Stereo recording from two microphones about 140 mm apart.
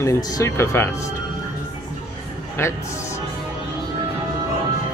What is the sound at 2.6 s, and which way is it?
Speech, 20° left (ahead or behind).